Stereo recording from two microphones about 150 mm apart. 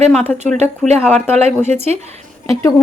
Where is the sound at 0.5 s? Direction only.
50° right (ahead or behind).